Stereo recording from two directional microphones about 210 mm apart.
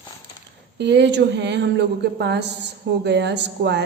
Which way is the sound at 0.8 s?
55° right (ahead or behind).